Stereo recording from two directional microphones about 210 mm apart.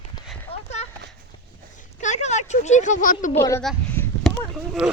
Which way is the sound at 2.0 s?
35° left (ahead or behind).